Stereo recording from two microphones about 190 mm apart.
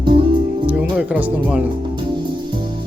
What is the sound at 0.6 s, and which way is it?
Music, 10° right (ahead or behind).